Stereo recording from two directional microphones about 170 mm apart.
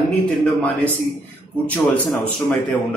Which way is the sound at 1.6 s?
10° left (ahead or behind).